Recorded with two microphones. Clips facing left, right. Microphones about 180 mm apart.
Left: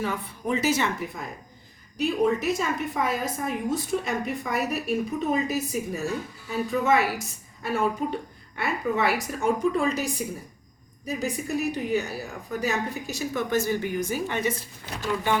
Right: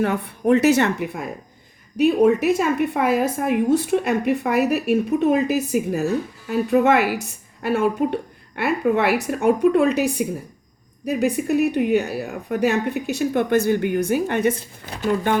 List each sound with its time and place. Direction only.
0.0 s a woman's voice: 65° right (ahead or behind)